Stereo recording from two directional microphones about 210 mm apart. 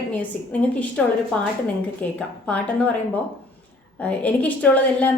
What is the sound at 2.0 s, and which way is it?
Speech, 5° left (ahead or behind).